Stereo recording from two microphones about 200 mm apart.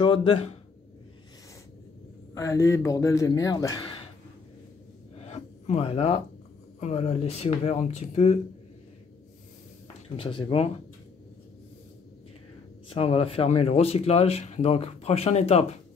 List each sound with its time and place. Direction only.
0.0 s speech: 25° left (ahead or behind)
2.3 s a man's voice: 15° left (ahead or behind)
5.2 s a sound: 35° left (ahead or behind)
6.8 s speech: 30° left (ahead or behind)
10.1 s speech: 25° left (ahead or behind)
12.9 s speech: 30° left (ahead or behind)